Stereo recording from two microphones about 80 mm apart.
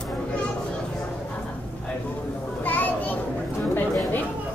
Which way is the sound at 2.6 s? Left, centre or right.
Left.